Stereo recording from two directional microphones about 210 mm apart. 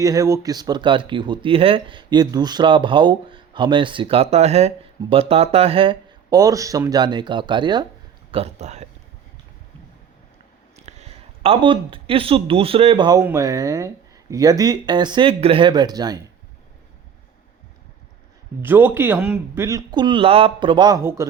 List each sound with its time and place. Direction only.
0.0 s speech: 15° right (ahead or behind); by 8.9 s 30° right (ahead or behind)
10.8 s speech: 30° right (ahead or behind)
18.6 s a man's voice: 10° right (ahead or behind)